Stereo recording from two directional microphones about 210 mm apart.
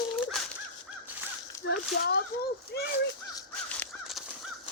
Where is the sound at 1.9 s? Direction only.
50° left (ahead or behind).